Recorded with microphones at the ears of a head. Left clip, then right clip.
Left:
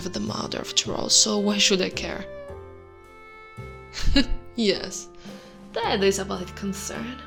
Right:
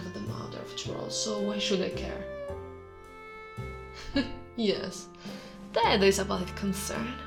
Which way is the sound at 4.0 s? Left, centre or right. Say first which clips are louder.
Left 8 dB; left.